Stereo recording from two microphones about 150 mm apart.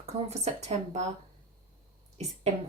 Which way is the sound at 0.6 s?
45° right (ahead or behind).